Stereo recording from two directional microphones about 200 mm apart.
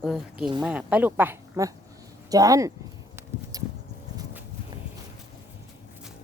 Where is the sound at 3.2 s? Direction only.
10° right (ahead or behind).